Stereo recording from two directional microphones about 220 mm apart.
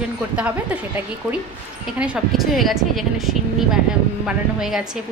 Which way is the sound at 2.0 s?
5° right (ahead or behind).